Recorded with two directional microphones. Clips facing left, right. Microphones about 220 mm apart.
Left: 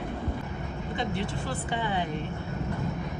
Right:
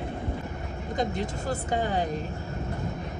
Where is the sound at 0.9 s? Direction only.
40° right (ahead or behind).